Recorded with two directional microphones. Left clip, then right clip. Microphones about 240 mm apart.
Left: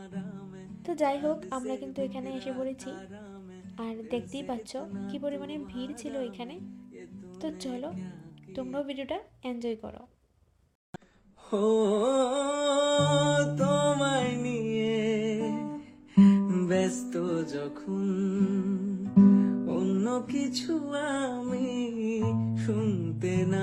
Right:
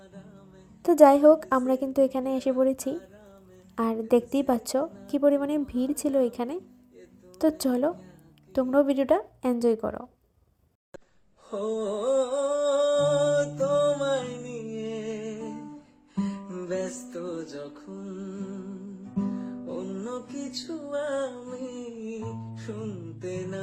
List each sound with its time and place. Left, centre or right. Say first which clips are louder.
0.9 s a woman's voice: right 12 dB; right
11.5 s music: left 4 dB; left